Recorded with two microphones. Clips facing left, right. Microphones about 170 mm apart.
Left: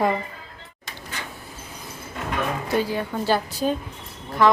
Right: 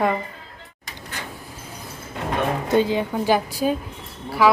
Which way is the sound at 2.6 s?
20° right (ahead or behind).